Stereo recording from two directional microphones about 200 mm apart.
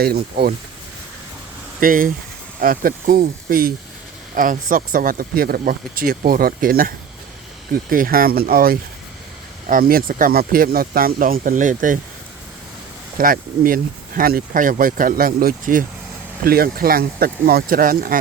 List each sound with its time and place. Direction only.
0.0 s speech: 50° right (ahead or behind)
1.8 s speech: 45° right (ahead or behind)
13.1 s speech: 45° right (ahead or behind)